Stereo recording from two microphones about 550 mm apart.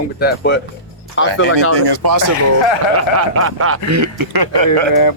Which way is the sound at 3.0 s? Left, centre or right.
Right.